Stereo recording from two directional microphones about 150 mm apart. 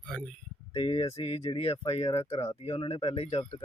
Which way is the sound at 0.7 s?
40° left (ahead or behind).